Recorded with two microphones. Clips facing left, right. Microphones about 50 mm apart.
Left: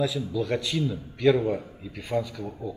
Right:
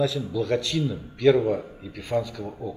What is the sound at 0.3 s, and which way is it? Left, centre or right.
A man's voice, centre.